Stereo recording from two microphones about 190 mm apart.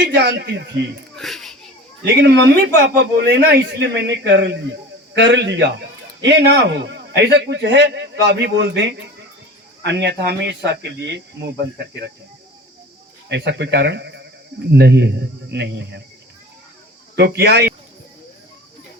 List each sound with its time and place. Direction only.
0.0 s a man's voice: 65° right (ahead or behind)
1.1 s a sound: centre (ahead or behind)
2.0 s a man's voice: 65° right (ahead or behind)
13.2 s a man's voice: 65° right (ahead or behind)
17.2 s a man's voice: 60° right (ahead or behind)